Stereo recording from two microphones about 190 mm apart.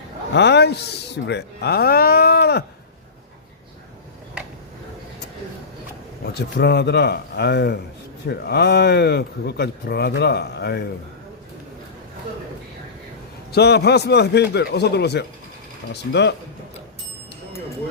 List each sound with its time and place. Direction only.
0.3 s speech: 65° left (ahead or behind)
6.6 s speech: 60° left (ahead or behind)
13.5 s speech: 60° left (ahead or behind)